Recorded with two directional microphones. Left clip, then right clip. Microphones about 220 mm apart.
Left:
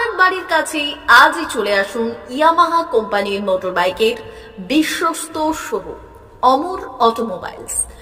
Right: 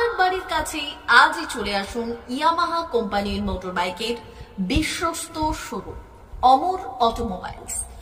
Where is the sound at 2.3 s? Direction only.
15° left (ahead or behind).